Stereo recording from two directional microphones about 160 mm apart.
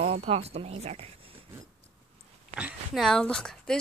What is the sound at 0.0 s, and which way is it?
Speech, 40° right (ahead or behind).